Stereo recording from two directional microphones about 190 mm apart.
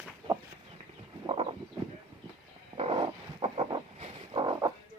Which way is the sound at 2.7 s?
30° right (ahead or behind).